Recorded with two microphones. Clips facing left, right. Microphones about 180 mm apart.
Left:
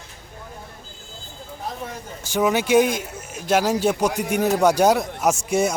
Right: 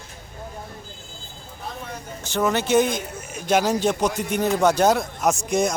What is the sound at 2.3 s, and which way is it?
Speech, 10° left (ahead or behind).